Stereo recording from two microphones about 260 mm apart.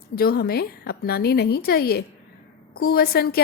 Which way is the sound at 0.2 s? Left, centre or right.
Left.